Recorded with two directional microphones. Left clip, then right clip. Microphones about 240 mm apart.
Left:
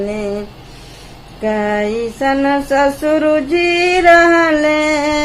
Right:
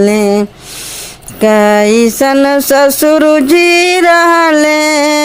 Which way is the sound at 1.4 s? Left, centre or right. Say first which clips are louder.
Right 9 dB; right.